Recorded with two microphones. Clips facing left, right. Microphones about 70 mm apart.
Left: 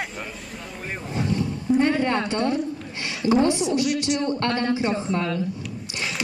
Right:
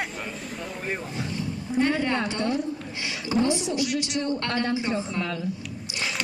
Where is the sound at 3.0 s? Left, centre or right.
Left.